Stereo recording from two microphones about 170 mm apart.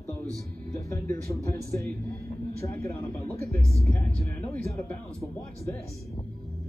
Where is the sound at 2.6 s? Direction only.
15° left (ahead or behind).